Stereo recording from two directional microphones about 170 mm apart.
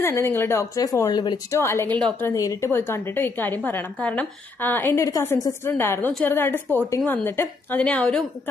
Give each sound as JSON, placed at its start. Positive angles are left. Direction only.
{"t": 0.0, "sound": "a woman's voice", "side_deg": 15}
{"t": 2.3, "sound": "a woman's voice", "side_deg": 20}